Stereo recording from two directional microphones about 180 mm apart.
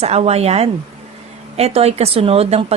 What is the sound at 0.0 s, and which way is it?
A woman's voice, 35° right (ahead or behind).